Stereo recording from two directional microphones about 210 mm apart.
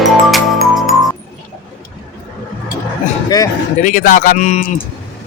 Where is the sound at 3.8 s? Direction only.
40° left (ahead or behind).